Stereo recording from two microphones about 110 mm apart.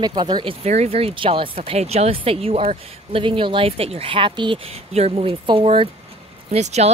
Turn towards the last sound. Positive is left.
turn(degrees=-80)